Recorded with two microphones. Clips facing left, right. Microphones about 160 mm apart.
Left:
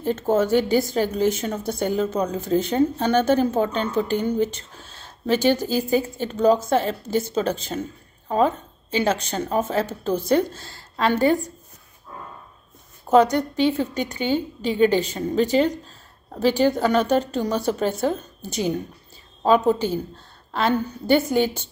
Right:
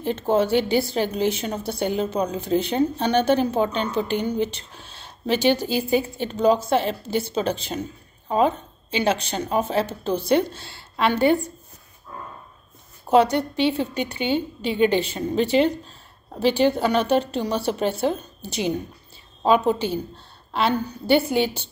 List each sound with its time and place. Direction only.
0.0 s a woman's voice: 45° left (ahead or behind)
13.1 s a woman's voice: 45° left (ahead or behind)